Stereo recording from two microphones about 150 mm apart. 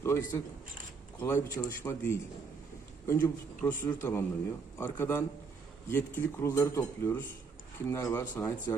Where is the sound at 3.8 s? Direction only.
20° left (ahead or behind).